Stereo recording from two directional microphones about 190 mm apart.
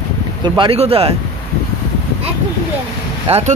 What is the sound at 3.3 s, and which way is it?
Speech, 30° right (ahead or behind).